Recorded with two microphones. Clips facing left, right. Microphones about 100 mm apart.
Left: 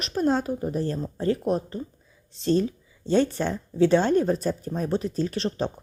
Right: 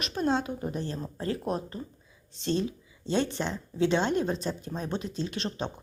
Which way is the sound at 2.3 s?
35° left (ahead or behind).